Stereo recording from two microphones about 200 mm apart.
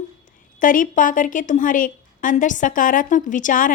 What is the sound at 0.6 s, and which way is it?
A woman's voice, 40° left (ahead or behind).